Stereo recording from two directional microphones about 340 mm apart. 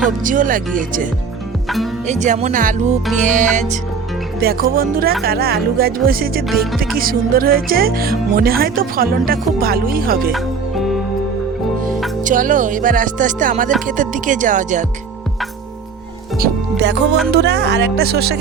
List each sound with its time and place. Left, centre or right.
0.3 s music: right
2.0 s music: right
12.2 s music: right
16.4 s speech: right
17.3 s music: right